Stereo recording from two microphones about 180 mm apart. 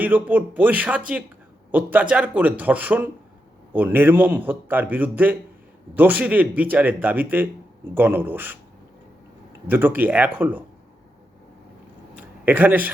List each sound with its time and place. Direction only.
0.0 s a man's voice: 10° right (ahead or behind)
9.6 s a man's voice: 10° right (ahead or behind)
12.1 s a sound: 10° right (ahead or behind)